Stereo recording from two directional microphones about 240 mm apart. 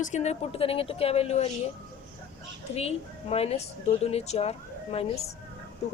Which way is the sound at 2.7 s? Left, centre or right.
Left.